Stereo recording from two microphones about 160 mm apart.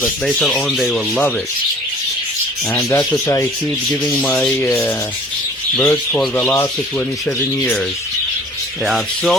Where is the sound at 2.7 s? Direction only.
15° left (ahead or behind).